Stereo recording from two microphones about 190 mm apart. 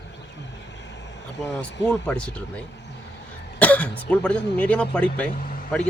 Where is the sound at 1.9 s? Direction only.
5° left (ahead or behind).